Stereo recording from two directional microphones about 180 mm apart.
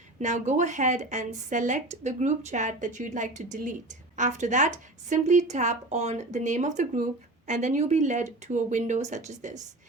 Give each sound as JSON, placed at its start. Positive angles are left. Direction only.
{"t": 0.2, "sound": "a woman's voice", "side_deg": -40}